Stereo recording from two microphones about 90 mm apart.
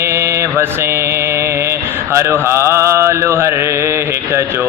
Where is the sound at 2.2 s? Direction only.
30° right (ahead or behind).